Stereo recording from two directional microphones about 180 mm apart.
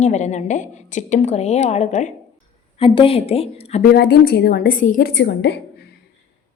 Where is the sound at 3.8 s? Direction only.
60° left (ahead or behind).